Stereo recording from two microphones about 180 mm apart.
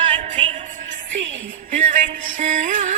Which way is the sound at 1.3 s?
45° right (ahead or behind).